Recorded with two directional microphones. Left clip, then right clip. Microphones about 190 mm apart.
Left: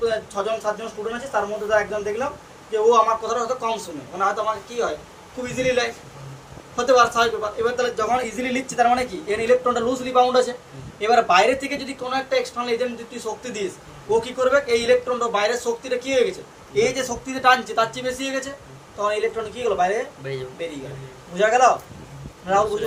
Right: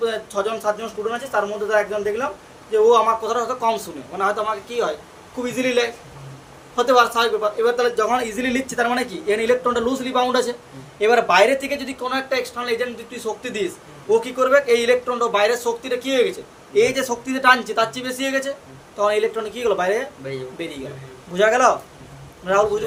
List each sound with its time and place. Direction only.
0.0 s a man's voice: 60° right (ahead or behind)
20.2 s speech: centre (ahead or behind)
21.3 s a man's voice: 60° right (ahead or behind)